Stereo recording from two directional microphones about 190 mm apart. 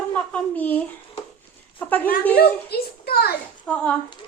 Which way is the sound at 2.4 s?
55° left (ahead or behind).